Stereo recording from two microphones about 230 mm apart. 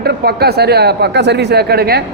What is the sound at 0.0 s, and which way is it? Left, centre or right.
A woman's voice, right.